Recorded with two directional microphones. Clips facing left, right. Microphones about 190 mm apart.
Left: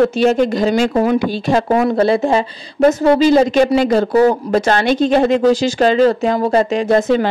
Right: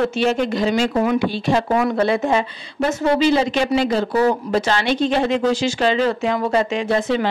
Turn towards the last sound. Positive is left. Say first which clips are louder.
# left 6 dB
turn(degrees=45)  # may be behind; listen again after turning